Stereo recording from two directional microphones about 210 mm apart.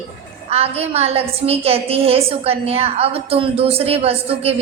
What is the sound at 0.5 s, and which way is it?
A woman's voice, 30° right (ahead or behind).